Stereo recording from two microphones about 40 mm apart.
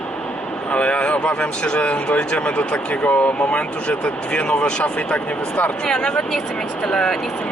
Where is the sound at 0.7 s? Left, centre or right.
Left.